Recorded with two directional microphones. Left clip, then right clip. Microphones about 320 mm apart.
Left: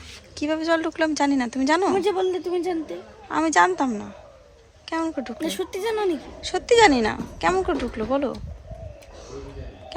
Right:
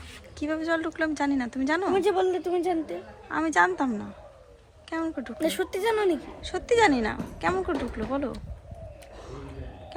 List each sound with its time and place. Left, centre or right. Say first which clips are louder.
0.3 s a woman's voice: left 5 dB; centre